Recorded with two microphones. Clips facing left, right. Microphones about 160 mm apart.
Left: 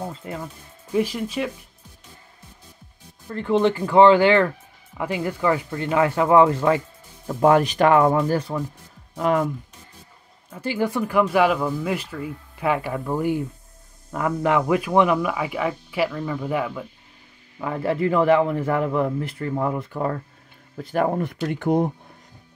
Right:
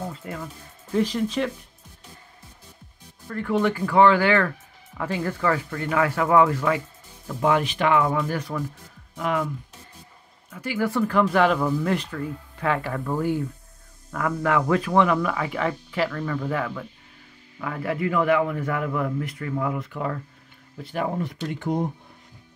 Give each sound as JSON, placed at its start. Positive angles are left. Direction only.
{"t": 0.2, "sound": "speech", "side_deg": 20}
{"t": 0.9, "sound": "speech", "side_deg": 10}
{"t": 3.3, "sound": "speech", "side_deg": 25}
{"t": 7.2, "sound": "speech", "side_deg": 45}
{"t": 9.1, "sound": "speech", "side_deg": 40}
{"t": 10.5, "sound": "speech", "side_deg": 25}
{"t": 10.9, "sound": "speech", "side_deg": 15}
{"t": 17.6, "sound": "a man's voice", "side_deg": 25}
{"t": 20.7, "sound": "speech", "side_deg": 50}